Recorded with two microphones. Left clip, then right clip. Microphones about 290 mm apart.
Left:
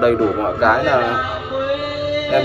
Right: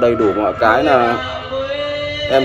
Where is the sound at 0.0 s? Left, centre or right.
Right.